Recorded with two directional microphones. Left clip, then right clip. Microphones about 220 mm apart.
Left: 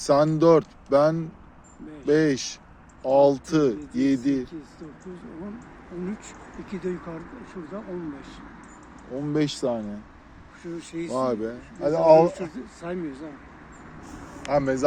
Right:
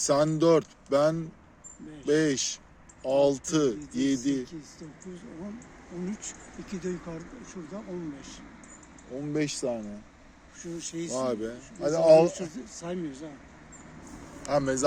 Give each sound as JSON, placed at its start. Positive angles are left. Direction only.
{"t": 0.0, "sound": "speech", "side_deg": -10}
{"t": 6.1, "sound": "speech", "side_deg": -50}
{"t": 9.1, "sound": "speech", "side_deg": 5}
{"t": 10.6, "sound": "speech", "side_deg": -50}
{"t": 11.1, "sound": "speech", "side_deg": -5}
{"t": 12.3, "sound": "speech", "side_deg": -55}
{"t": 14.5, "sound": "speech", "side_deg": -20}